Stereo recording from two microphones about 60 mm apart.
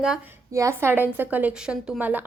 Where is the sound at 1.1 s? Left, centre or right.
Right.